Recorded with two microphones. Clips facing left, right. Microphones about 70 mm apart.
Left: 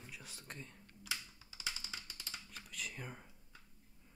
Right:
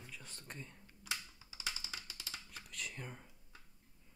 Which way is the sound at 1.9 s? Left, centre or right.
Centre.